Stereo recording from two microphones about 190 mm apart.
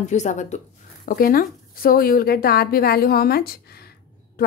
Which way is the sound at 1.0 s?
50° left (ahead or behind).